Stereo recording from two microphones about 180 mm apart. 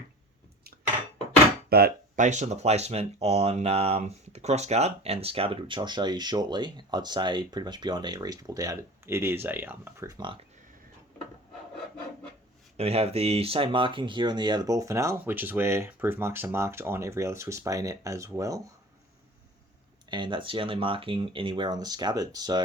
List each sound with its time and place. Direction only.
1.7 s a sound: 60° right (ahead or behind)
2.2 s speech: 40° right (ahead or behind)
12.7 s speech: 35° right (ahead or behind); by 18.7 s 20° right (ahead or behind)
20.1 s speech: 25° right (ahead or behind)